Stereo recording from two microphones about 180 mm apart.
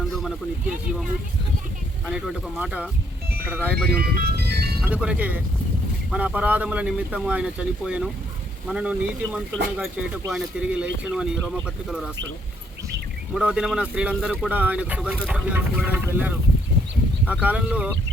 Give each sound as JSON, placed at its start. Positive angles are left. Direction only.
{"t": 2.0, "sound": "speech", "side_deg": 0}
{"t": 3.9, "sound": "music", "side_deg": -60}
{"t": 4.8, "sound": "speech", "side_deg": -5}
{"t": 13.3, "sound": "speech", "side_deg": -5}